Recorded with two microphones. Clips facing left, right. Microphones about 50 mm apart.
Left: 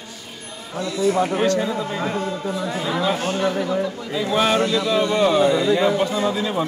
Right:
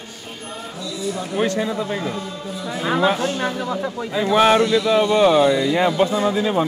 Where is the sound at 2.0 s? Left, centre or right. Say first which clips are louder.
Left 3 dB; left.